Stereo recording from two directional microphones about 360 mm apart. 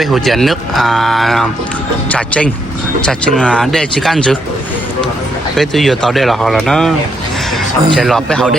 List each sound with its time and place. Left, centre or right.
0.0 s speech: centre
5.5 s speech: centre